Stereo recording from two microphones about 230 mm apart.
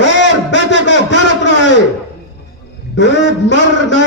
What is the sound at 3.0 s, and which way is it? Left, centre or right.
A man's voice, left.